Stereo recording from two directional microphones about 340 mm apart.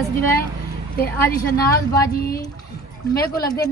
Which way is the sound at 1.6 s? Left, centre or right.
Centre.